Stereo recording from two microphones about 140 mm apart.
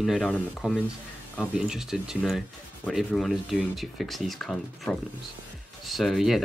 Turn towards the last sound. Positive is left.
turn(degrees=0)  # may be behind; listen again after turning